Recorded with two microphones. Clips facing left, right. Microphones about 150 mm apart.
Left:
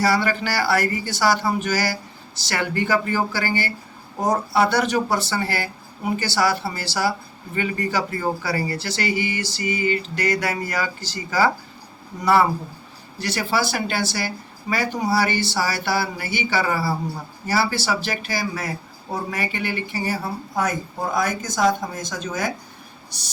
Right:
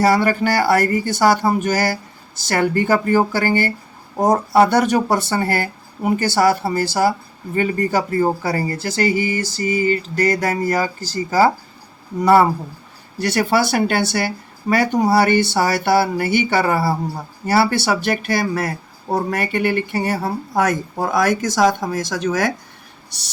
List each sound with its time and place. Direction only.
0.0 s speech: 50° right (ahead or behind)
13.1 s speech: 60° right (ahead or behind); by 22.5 s 75° right (ahead or behind)